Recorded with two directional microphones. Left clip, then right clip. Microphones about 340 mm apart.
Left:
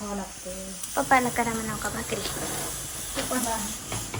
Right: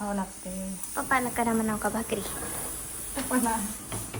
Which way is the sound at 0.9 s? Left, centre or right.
Centre.